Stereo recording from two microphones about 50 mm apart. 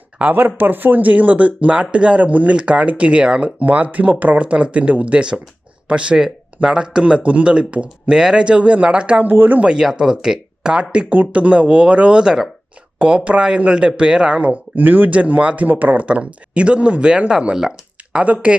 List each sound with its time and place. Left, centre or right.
0.2 s speech: right
9.2 s speech: right
9.6 s speech: centre
11.1 s speech: right
14.8 s speech: right; by 18.3 s centre